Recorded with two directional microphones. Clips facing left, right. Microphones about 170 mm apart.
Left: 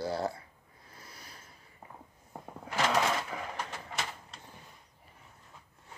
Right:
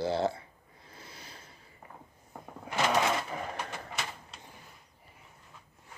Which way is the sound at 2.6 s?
15° right (ahead or behind).